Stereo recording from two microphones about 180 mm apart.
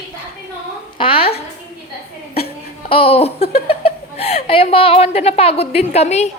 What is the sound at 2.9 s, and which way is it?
Speech, 30° left (ahead or behind).